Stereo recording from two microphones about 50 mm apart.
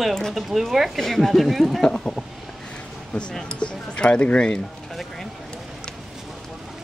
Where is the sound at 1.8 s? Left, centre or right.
Centre.